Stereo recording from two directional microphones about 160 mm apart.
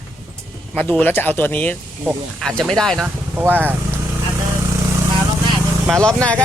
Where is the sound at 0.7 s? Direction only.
10° left (ahead or behind).